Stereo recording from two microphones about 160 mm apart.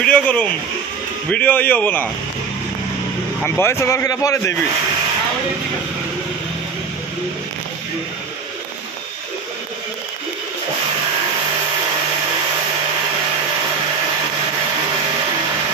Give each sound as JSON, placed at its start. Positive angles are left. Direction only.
{"t": 0.0, "sound": "a man's voice", "side_deg": 10}
{"t": 3.4, "sound": "speech", "side_deg": 15}